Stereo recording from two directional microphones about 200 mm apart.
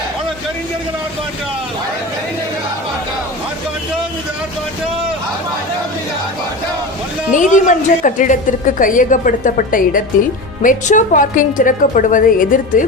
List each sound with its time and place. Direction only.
7.3 s a woman's voice: 40° left (ahead or behind)